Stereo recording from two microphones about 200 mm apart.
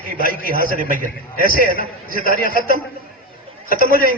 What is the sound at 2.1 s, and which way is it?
Speech, 45° left (ahead or behind).